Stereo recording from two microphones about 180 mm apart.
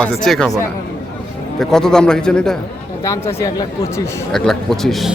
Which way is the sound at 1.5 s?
5° left (ahead or behind).